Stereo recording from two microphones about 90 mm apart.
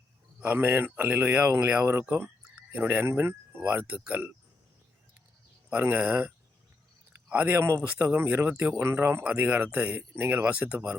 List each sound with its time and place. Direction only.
0.3 s speech: 20° right (ahead or behind)
1.9 s speech: 30° right (ahead or behind)
5.7 s speech: 20° right (ahead or behind)
9.2 s speech: 15° right (ahead or behind)